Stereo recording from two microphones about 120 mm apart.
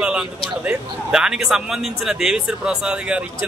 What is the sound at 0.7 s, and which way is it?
A man's voice, 5° right (ahead or behind).